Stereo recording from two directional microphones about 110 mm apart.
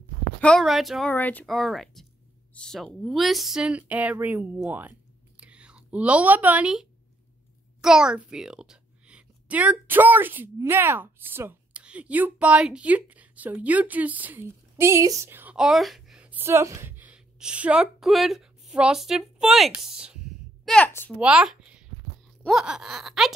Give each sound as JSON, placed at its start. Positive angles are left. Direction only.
{"t": 0.4, "sound": "speech", "side_deg": 5}
{"t": 1.0, "sound": "speech", "side_deg": 15}
{"t": 1.4, "sound": "speech", "side_deg": 0}
{"t": 5.4, "sound": "whispering", "side_deg": -10}
{"t": 7.8, "sound": "a child's voice", "side_deg": -5}
{"t": 15.5, "sound": "a sound", "side_deg": -5}
{"t": 16.2, "sound": "a woman's voice", "side_deg": -15}
{"t": 20.6, "sound": "a woman's voice", "side_deg": 10}
{"t": 21.2, "sound": "speech", "side_deg": -10}